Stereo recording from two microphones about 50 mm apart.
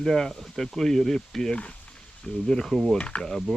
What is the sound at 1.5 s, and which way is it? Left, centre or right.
Speech, left.